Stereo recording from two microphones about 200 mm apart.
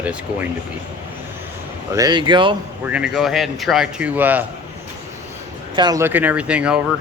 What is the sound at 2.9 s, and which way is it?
Speech, centre (ahead or behind).